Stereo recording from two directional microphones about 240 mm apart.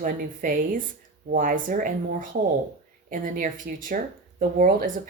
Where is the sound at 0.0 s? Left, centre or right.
Right.